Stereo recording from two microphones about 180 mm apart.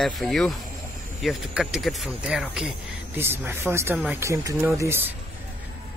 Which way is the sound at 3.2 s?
15° right (ahead or behind).